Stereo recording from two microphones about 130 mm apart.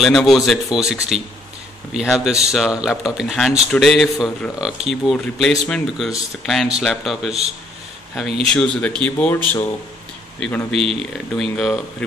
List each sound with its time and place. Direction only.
0.0 s speech: centre (ahead or behind)
2.0 s a man's voice: 5° right (ahead or behind)
10.4 s speech: 5° left (ahead or behind)
10.8 s speech: 50° right (ahead or behind)
11.1 s speech: 5° left (ahead or behind)